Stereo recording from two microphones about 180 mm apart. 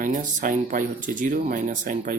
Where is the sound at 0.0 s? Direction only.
45° right (ahead or behind).